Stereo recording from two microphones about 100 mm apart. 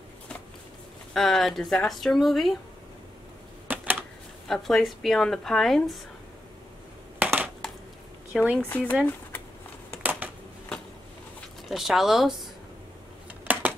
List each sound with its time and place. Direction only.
1.1 s a woman's voice: centre (ahead or behind)
3.6 s a sound: 20° right (ahead or behind)
4.5 s a woman's voice: 5° left (ahead or behind)
7.2 s crushing: 15° right (ahead or behind)
8.3 s speech: 10° right (ahead or behind)
8.6 s speech: 20° left (ahead or behind)
11.7 s a woman's voice: centre (ahead or behind)
13.5 s a sound: 20° right (ahead or behind)